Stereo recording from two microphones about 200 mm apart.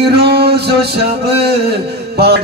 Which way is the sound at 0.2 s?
55° right (ahead or behind).